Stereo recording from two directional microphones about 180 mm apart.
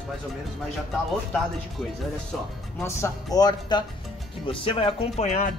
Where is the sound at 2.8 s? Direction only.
20° left (ahead or behind); by 5.5 s 40° left (ahead or behind).